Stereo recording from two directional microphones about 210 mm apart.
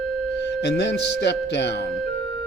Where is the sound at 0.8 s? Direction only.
55° left (ahead or behind).